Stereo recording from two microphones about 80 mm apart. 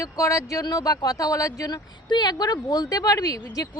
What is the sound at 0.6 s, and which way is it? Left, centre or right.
A woman's voice, left.